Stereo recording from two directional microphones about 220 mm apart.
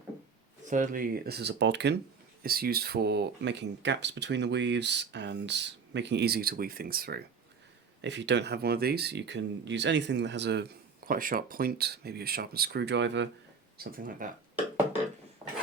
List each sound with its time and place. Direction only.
0.6 s speech: 35° right (ahead or behind); by 13.2 s 55° right (ahead or behind)
13.7 s speech: 40° right (ahead or behind)